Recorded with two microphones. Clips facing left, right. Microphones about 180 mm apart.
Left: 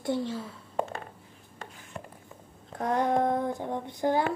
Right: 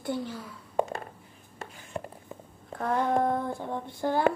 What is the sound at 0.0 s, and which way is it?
Speech, 25° left (ahead or behind).